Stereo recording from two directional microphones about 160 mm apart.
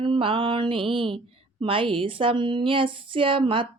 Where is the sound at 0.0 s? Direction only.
30° right (ahead or behind).